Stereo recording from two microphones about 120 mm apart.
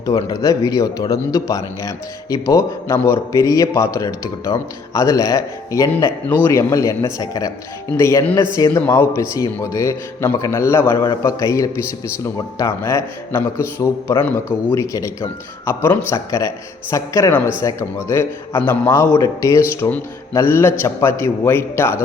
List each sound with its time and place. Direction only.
0.3 s speech: 30° left (ahead or behind)
6.2 s a man's voice: 15° left (ahead or behind)
6.5 s speech: 25° left (ahead or behind)
14.2 s a man's voice: 15° left (ahead or behind)
14.9 s speech: 25° left (ahead or behind)
19.1 s speech: 30° left (ahead or behind)